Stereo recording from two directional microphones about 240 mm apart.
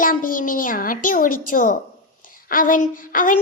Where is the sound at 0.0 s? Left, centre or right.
Left.